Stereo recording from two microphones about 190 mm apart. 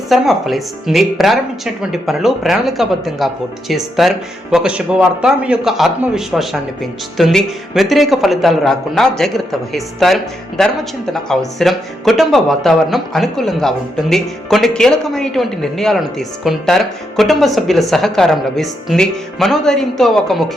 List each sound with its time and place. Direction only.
0.1 s speech: centre (ahead or behind)